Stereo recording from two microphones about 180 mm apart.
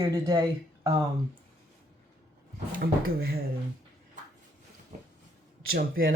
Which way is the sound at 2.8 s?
55° right (ahead or behind).